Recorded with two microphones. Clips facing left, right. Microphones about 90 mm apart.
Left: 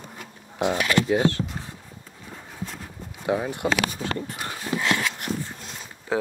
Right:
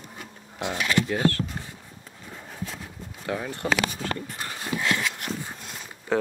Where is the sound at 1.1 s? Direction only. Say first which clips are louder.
Left 3 dB; 20° left (ahead or behind).